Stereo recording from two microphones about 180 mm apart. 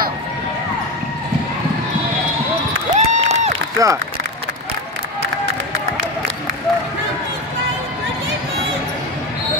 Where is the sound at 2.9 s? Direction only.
40° right (ahead or behind).